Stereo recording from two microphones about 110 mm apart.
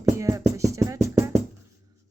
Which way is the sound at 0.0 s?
30° right (ahead or behind).